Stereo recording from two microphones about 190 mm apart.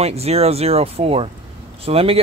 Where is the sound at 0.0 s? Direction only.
35° right (ahead or behind).